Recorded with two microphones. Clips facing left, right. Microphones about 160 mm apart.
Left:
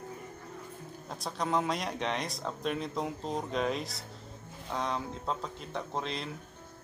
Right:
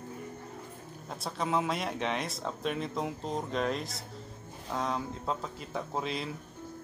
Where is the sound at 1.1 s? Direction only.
Centre (ahead or behind).